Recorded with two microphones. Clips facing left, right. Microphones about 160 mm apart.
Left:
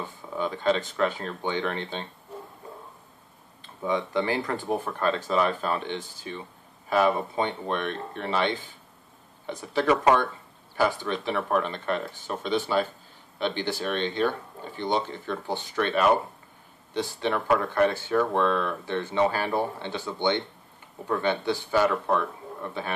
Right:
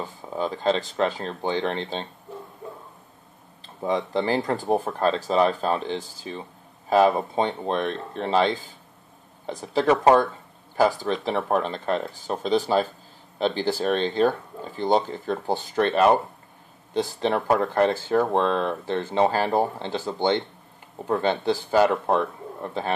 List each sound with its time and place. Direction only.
0.0 s speech: 35° right (ahead or behind)
3.6 s speech: 35° right (ahead or behind)
9.6 s speech: 35° right (ahead or behind)
19.1 s speech: 40° right (ahead or behind)